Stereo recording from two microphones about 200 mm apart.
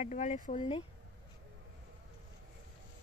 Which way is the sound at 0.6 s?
30° left (ahead or behind).